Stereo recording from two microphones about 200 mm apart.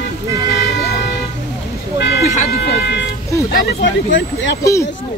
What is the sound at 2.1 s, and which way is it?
Speech, 50° left (ahead or behind).